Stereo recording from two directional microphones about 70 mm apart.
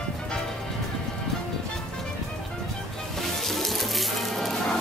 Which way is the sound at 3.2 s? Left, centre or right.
Centre.